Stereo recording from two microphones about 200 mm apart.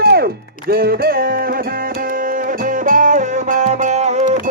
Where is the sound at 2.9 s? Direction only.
40° right (ahead or behind).